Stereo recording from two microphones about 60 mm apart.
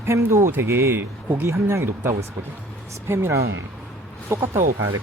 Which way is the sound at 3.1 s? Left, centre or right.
Right.